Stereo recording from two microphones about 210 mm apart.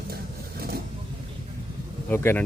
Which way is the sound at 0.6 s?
45° right (ahead or behind).